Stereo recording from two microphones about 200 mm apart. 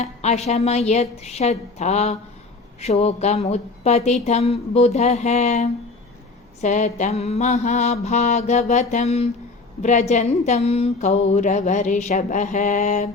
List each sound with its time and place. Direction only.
0.0 s mantra: 35° left (ahead or behind)